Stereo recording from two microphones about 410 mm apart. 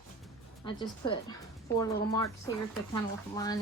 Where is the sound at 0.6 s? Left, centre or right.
Centre.